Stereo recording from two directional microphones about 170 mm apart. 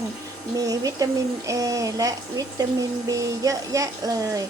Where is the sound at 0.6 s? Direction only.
20° right (ahead or behind).